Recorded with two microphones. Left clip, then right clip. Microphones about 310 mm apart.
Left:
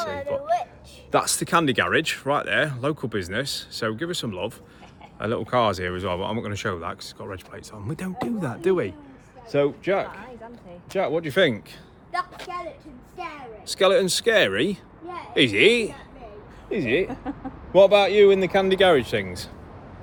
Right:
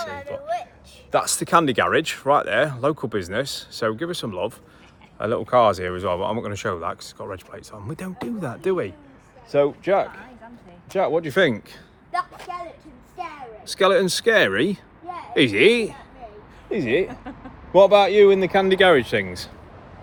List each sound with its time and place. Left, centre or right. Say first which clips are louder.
0.4 s a woman's voice: left 3 dB; left
1.1 s speech: right 3 dB; centre; by 11.6 s right
12.1 s a sound: right 2 dB; centre
13.2 s a child's voice: right 2 dB; centre
13.7 s speech: right 1 dB; right